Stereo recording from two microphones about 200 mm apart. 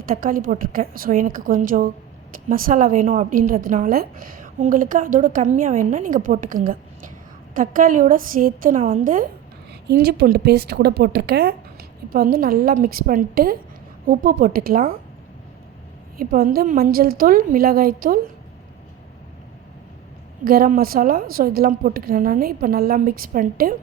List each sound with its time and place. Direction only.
0.0 s a woman's voice: 45° right (ahead or behind)
9.8 s a woman's voice: 55° right (ahead or behind)
16.1 s a woman's voice: 45° right (ahead or behind)
20.4 s a woman's voice: 45° right (ahead or behind)